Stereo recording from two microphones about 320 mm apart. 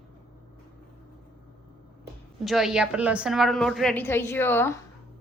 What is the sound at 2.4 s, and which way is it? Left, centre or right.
A woman's voice, centre.